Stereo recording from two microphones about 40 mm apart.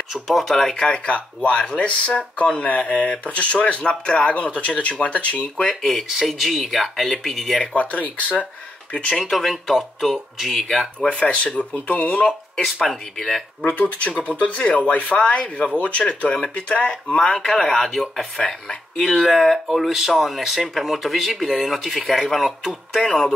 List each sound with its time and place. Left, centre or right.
0.1 s speech: centre
0.5 s speech: centre
0.7 s speech: left
5.8 s speech: centre
7.7 s speech: left
9.3 s speech: centre
10.7 s speech: centre
11.1 s speech: left
12.8 s speech: centre
13.7 s speech: left
17.6 s speech: centre
18.4 s speech: left
18.9 s speech: centre
23.0 s speech: centre